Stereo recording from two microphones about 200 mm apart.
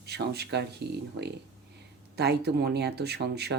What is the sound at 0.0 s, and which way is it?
Speech, 55° right (ahead or behind).